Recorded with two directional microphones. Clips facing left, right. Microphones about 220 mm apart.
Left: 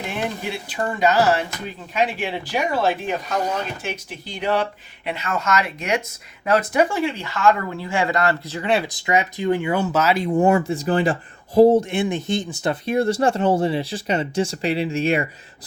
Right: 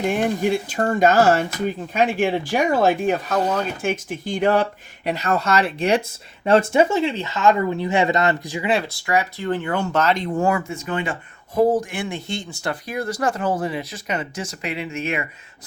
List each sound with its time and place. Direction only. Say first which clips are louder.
0.1 s speech: right 6 dB; 45° right (ahead or behind)
5.0 s speech: right 3 dB; 40° right (ahead or behind); by 8.7 s 15° right (ahead or behind)
8.8 s speech: left 1 dB; 20° left (ahead or behind)
10.4 s speech: left 6 dB; 30° left (ahead or behind)